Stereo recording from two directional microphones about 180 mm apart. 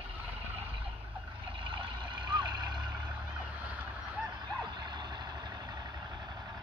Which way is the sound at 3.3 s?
10° right (ahead or behind).